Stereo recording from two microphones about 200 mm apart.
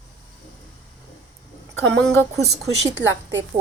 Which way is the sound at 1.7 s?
65° right (ahead or behind).